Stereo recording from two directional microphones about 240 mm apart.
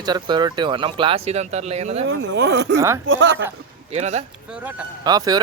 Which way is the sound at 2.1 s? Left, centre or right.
Right.